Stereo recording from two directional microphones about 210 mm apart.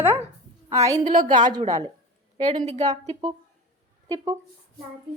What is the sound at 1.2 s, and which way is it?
Speech, 35° right (ahead or behind).